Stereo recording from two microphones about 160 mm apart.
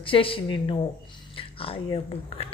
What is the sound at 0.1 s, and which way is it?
A woman's voice, 35° left (ahead or behind).